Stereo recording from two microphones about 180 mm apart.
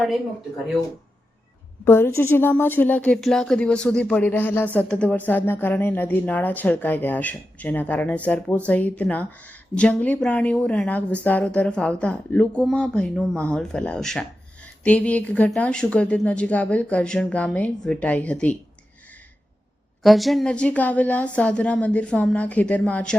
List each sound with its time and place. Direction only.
1.8 s a woman's voice: 15° left (ahead or behind)
20.0 s a woman's voice: centre (ahead or behind)